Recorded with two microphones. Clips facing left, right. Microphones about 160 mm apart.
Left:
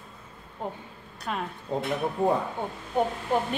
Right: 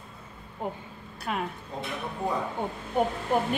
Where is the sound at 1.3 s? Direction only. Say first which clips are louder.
Right 1 dB; 5° right (ahead or behind).